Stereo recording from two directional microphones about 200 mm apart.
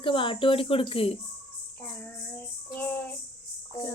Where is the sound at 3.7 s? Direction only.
15° left (ahead or behind).